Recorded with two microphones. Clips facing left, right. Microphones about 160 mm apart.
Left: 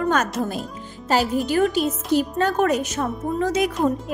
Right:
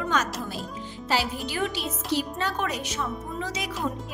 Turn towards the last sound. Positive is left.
turn(degrees=50)  # may be behind; listen again after turning